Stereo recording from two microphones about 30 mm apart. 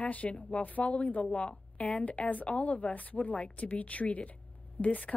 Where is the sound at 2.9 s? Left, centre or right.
Left.